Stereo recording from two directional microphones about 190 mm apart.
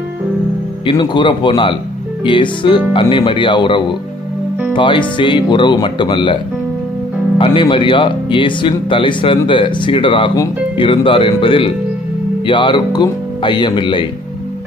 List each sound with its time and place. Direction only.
0.8 s speech: 25° left (ahead or behind)
7.3 s speech: 25° left (ahead or behind)